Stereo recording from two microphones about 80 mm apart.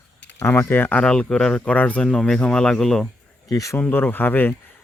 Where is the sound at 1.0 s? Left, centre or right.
Centre.